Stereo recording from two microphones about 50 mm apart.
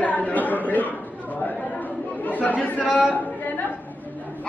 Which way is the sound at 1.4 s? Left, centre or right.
Left.